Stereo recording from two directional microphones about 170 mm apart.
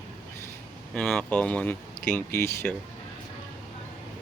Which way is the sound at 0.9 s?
5° left (ahead or behind).